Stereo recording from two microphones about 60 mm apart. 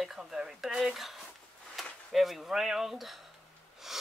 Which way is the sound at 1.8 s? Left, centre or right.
Centre.